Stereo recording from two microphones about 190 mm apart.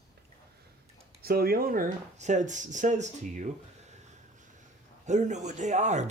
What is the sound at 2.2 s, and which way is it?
Speech, 40° right (ahead or behind).